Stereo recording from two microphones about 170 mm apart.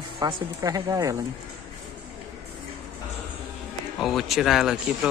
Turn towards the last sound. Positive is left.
turn(degrees=0)  # may be behind; listen again after turning